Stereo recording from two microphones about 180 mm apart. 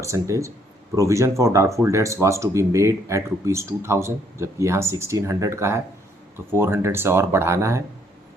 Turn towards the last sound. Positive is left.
turn(degrees=-15)  # may be behind; listen again after turning